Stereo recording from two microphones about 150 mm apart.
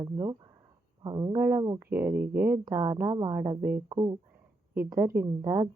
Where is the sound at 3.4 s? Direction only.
15° right (ahead or behind).